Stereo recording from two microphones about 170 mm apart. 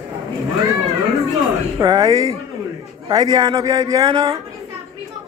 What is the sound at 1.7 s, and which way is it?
Speech, 20° right (ahead or behind).